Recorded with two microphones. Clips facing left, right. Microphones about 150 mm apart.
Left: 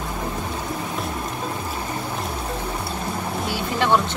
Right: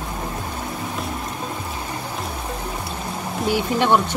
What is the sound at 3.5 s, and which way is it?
Speech, 15° right (ahead or behind).